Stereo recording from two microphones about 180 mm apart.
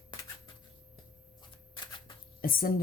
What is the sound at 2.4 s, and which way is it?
Speech, 55° left (ahead or behind).